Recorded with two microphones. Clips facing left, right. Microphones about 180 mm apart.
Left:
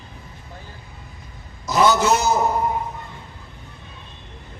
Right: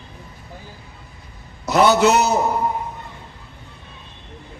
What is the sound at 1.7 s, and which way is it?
Speech, 65° right (ahead or behind).